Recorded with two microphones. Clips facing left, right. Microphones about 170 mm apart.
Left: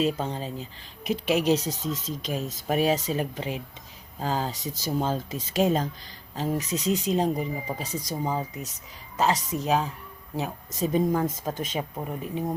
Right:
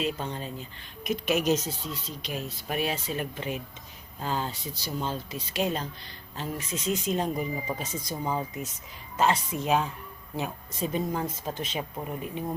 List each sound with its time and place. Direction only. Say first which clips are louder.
0.0 s speech: left 5 dB; 35° left (ahead or behind)